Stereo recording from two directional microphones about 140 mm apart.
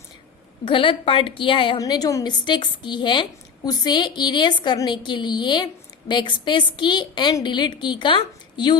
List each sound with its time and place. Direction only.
0.6 s a woman's voice: 40° left (ahead or behind)
1.8 s a woman's voice: 25° left (ahead or behind)